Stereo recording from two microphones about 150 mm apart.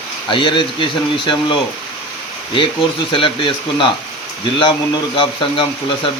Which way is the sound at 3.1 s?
35° left (ahead or behind).